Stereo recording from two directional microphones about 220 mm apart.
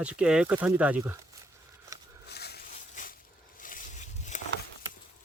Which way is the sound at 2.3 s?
45° left (ahead or behind).